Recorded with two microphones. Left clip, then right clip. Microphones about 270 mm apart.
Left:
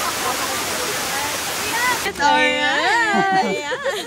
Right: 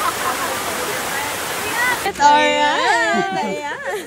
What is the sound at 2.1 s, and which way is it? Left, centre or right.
Speech, centre.